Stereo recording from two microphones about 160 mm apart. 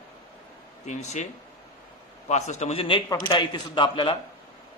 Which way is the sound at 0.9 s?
45° left (ahead or behind).